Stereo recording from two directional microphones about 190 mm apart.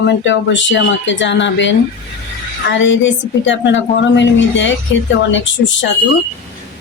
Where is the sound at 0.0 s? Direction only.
70° left (ahead or behind).